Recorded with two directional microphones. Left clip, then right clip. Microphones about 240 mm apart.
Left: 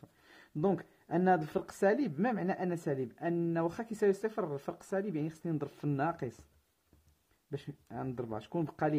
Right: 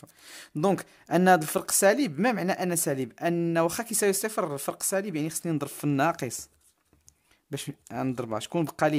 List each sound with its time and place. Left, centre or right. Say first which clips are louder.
0.0 s speech: right 11 dB; right
7.5 s speech: right 8 dB; right